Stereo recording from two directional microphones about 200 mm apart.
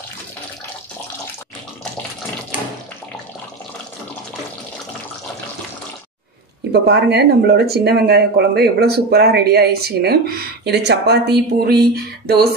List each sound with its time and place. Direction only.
6.7 s speech: 55° right (ahead or behind)